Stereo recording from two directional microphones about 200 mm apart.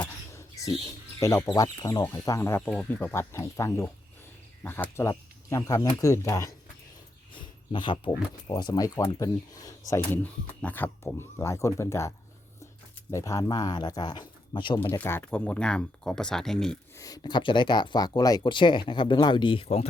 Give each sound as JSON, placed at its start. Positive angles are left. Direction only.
{"t": 0.0, "sound": "a sound", "side_deg": 15}
{"t": 1.2, "sound": "speech", "side_deg": 15}
{"t": 14.8, "sound": "speech", "side_deg": 10}
{"t": 17.0, "sound": "speech", "side_deg": 20}